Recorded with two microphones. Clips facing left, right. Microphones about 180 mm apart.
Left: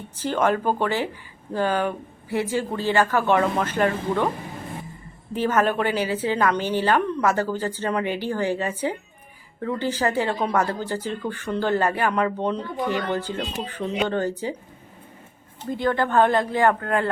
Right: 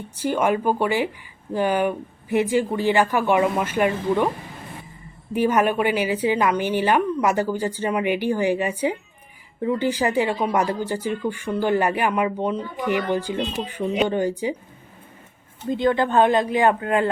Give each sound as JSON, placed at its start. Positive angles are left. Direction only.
{"t": 0.2, "sound": "speech", "side_deg": -10}
{"t": 5.3, "sound": "speech", "side_deg": -15}
{"t": 15.7, "sound": "speech", "side_deg": -20}